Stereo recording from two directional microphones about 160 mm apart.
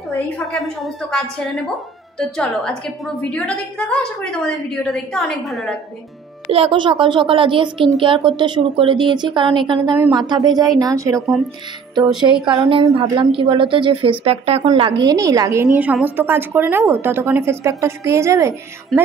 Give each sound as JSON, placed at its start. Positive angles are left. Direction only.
{"t": 0.1, "sound": "a woman's voice", "side_deg": 0}
{"t": 6.5, "sound": "a child's voice", "side_deg": -35}
{"t": 18.9, "sound": "a woman's voice", "side_deg": 0}